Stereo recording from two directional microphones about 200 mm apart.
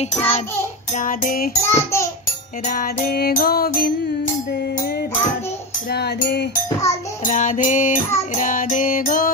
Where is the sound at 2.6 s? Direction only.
45° left (ahead or behind).